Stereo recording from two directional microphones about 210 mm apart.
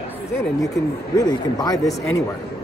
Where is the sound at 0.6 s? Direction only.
15° left (ahead or behind).